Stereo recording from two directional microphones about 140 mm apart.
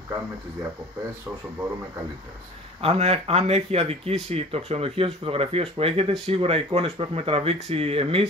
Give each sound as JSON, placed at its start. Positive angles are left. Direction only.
{"t": 2.8, "sound": "speech", "side_deg": -45}